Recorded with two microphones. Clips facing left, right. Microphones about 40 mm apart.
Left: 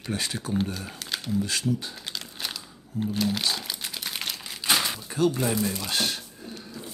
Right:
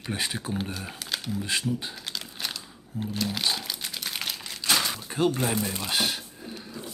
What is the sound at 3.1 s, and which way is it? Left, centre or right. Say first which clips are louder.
Speech: left 3 dB; centre.